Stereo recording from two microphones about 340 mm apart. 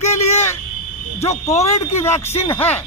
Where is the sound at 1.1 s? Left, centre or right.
Centre.